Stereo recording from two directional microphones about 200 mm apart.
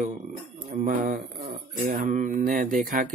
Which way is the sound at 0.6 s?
40° right (ahead or behind).